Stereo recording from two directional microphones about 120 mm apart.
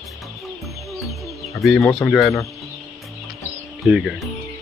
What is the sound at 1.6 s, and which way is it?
Speech, centre (ahead or behind).